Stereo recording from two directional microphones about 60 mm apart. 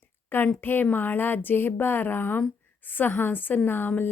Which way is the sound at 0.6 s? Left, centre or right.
Left.